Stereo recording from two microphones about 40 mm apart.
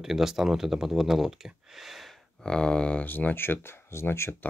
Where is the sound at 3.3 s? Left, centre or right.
Left.